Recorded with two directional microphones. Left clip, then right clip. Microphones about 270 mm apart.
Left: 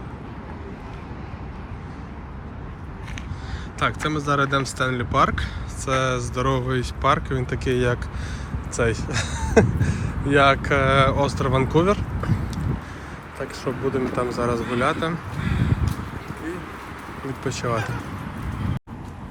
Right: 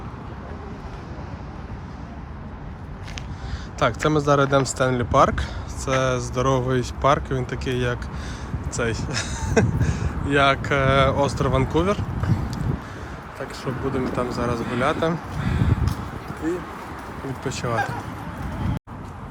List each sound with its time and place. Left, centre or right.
3.8 s speech: centre
13.9 s speech: centre
16.4 s a sound: right
17.4 s speech: centre